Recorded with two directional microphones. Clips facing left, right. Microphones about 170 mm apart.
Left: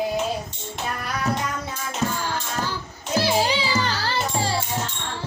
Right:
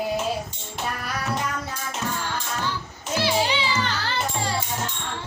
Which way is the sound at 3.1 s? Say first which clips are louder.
Left 2 dB; 40° left (ahead or behind).